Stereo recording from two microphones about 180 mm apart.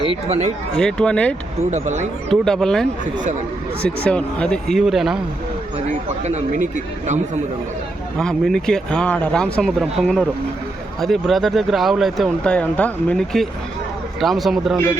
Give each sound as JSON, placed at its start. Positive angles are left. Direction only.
{"t": 0.0, "sound": "speech", "side_deg": -35}
{"t": 0.8, "sound": "speech", "side_deg": 5}
{"t": 1.7, "sound": "speech", "side_deg": -40}
{"t": 2.3, "sound": "speech", "side_deg": 5}
{"t": 3.8, "sound": "speech", "side_deg": 5}
{"t": 6.2, "sound": "speech", "side_deg": -40}
{"t": 8.2, "sound": "speech", "side_deg": 5}